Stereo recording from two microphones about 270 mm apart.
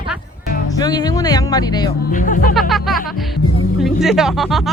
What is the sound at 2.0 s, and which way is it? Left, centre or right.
Speech, left.